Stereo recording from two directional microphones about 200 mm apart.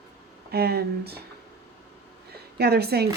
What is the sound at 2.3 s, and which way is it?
Speech, 50° right (ahead or behind).